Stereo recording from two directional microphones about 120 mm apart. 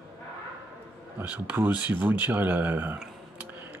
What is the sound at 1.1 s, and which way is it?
Speech, 15° right (ahead or behind).